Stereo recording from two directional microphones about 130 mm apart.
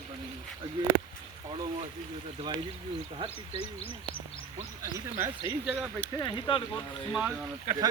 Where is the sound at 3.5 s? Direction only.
45° left (ahead or behind).